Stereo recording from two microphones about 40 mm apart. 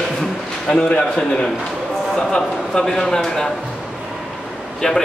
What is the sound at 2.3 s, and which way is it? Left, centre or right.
Speech, centre.